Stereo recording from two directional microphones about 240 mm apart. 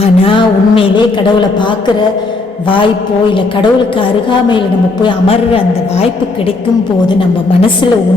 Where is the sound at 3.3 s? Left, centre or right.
Left.